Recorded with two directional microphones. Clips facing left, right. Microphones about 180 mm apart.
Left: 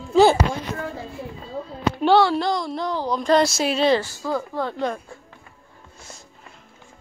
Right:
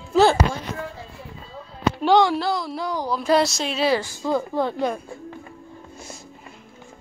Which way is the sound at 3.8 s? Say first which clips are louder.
Right 2 dB; 15° right (ahead or behind).